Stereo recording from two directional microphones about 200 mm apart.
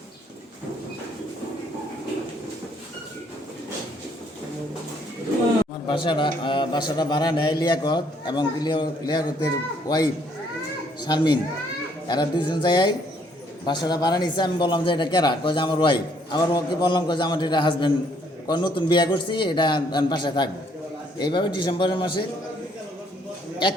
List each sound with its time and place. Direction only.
5.9 s a woman's voice: 25° left (ahead or behind)